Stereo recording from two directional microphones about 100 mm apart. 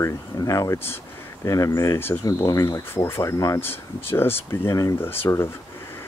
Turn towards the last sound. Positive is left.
turn(degrees=25)  # may be behind; listen again after turning